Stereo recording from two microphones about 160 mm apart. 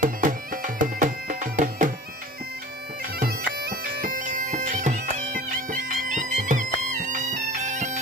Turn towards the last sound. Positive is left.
turn(degrees=-50)  # may be behind; listen again after turning